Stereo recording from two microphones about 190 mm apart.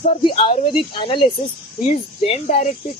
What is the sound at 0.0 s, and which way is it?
Speech, 30° left (ahead or behind).